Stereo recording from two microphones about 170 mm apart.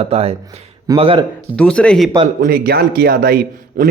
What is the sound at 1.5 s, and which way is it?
Speech, 5° left (ahead or behind).